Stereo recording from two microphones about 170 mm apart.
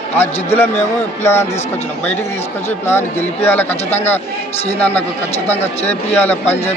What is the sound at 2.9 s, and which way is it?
A man's voice, 15° left (ahead or behind).